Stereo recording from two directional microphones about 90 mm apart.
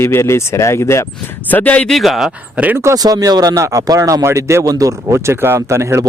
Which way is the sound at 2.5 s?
20° right (ahead or behind).